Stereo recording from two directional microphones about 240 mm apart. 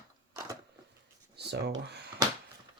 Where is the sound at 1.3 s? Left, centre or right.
Right.